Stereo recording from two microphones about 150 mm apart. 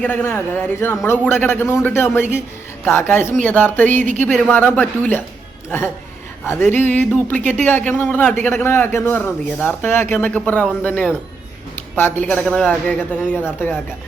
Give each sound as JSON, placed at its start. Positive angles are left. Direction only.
{"t": 0.0, "sound": "speech", "side_deg": 15}
{"t": 6.4, "sound": "speech", "side_deg": 15}